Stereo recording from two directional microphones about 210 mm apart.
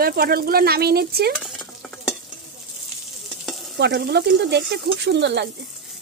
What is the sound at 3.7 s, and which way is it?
Speech, 50° right (ahead or behind).